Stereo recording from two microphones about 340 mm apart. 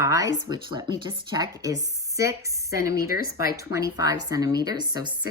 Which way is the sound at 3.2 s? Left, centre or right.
Left.